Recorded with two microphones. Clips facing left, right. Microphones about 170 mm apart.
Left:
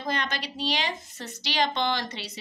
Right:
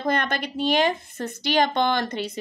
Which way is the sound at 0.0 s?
55° right (ahead or behind).